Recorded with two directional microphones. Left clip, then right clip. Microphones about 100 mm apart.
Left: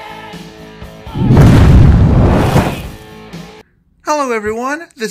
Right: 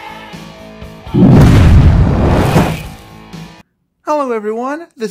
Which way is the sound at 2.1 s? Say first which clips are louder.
Right 1 dB; centre (ahead or behind).